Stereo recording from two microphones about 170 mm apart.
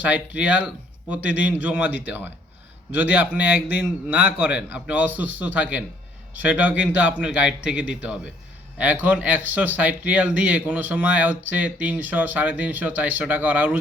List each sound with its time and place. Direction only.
0.0 s speech: 10° right (ahead or behind)